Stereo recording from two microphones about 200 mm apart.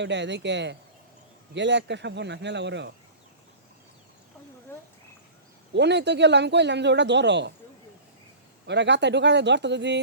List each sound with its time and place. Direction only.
0.0 s speech: 60° right (ahead or behind)
5.7 s speech: 60° right (ahead or behind)
8.6 s speech: 60° right (ahead or behind)